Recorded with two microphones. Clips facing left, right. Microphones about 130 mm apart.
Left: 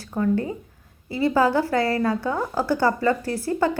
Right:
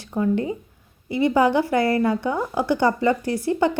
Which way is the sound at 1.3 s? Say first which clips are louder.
Right 1 dB; 20° right (ahead or behind).